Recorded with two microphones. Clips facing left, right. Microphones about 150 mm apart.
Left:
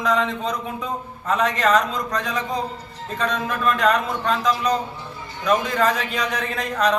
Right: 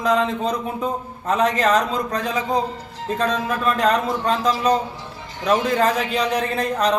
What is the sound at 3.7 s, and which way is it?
A man's voice, 35° right (ahead or behind).